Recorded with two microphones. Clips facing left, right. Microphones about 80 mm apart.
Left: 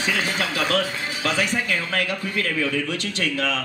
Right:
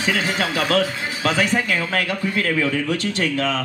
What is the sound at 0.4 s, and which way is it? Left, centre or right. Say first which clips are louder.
A man's voice: right 3 dB; right.